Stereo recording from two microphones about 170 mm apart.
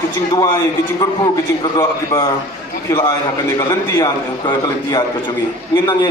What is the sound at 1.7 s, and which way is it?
A man's voice, 20° left (ahead or behind).